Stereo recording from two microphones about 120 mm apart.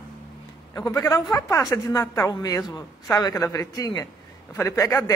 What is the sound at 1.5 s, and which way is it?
A man's voice, 30° left (ahead or behind).